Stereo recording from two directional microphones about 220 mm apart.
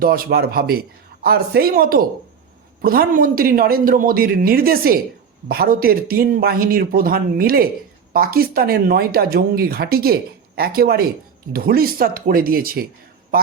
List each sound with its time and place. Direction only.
0.0 s a woman's voice: 40° right (ahead or behind)